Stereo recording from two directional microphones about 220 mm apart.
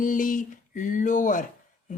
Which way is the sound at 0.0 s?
35° left (ahead or behind).